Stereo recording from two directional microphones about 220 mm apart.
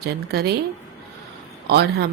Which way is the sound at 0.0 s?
45° right (ahead or behind).